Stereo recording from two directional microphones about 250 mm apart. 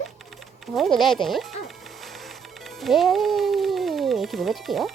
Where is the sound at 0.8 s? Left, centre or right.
Centre.